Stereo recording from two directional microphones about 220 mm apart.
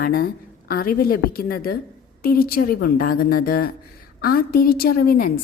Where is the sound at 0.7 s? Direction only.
40° left (ahead or behind).